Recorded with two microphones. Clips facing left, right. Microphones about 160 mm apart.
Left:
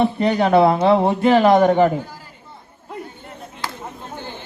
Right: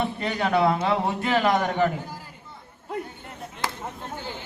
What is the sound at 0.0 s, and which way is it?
A man's voice, 30° left (ahead or behind).